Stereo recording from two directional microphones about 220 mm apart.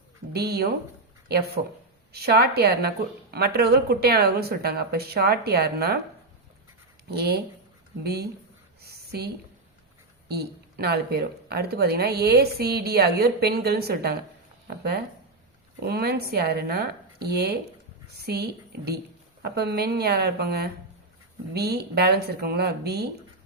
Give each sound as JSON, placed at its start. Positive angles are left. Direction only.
{"t": 0.3, "sound": "speech", "side_deg": -45}
{"t": 2.1, "sound": "speech", "side_deg": -45}
{"t": 7.1, "sound": "speech", "side_deg": -45}
{"t": 15.8, "sound": "speech", "side_deg": -45}